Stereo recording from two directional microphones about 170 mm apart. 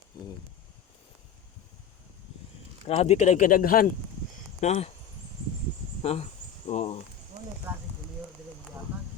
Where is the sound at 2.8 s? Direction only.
40° left (ahead or behind); by 3.9 s 55° left (ahead or behind).